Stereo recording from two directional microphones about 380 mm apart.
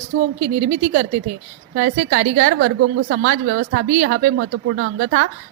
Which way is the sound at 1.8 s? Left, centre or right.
Right.